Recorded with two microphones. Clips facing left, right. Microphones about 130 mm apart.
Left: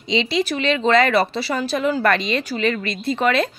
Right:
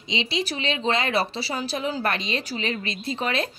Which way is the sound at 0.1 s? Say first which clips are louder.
Left 7 dB; 65° left (ahead or behind).